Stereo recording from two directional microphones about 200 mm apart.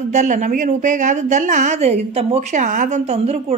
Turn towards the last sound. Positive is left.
turn(degrees=-30)  # may be behind; listen again after turning